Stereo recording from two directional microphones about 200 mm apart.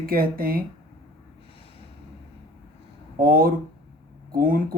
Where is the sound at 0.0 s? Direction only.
45° right (ahead or behind).